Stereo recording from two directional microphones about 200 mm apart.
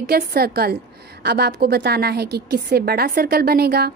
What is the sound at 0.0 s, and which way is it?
A woman's voice, 50° right (ahead or behind).